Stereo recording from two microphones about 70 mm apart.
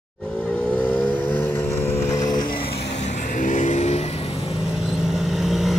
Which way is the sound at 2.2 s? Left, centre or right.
Left.